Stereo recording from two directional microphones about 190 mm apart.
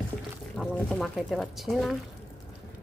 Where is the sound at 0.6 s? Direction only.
Centre (ahead or behind).